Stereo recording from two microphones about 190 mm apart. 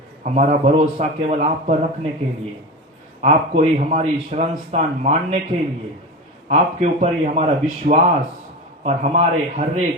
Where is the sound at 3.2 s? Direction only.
35° right (ahead or behind).